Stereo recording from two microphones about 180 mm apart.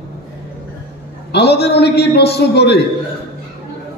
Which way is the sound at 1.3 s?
65° left (ahead or behind).